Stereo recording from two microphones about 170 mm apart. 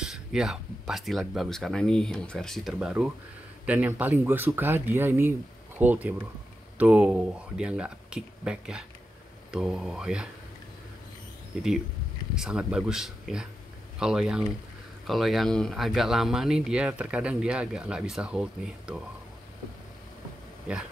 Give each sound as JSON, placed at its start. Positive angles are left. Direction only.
{"t": 0.0, "sound": "speech", "side_deg": -5}
{"t": 11.5, "sound": "speech", "side_deg": -5}